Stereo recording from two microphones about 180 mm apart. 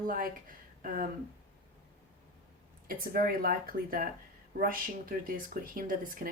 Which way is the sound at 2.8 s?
55° right (ahead or behind).